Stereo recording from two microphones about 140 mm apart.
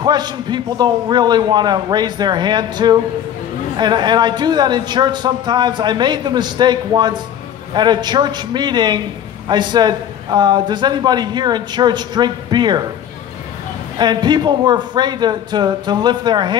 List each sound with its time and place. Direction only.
0.0 s speech: 30° right (ahead or behind)
13.9 s speech: 30° right (ahead or behind)